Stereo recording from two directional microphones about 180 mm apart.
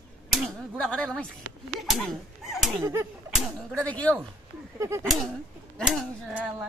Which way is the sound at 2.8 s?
15° right (ahead or behind).